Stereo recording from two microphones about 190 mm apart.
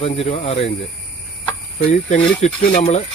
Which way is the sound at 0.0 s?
30° left (ahead or behind).